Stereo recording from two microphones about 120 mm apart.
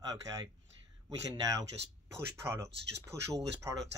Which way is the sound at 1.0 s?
30° right (ahead or behind).